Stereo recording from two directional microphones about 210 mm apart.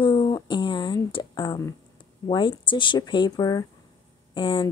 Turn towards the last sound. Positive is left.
turn(degrees=25)  # may be behind; listen again after turning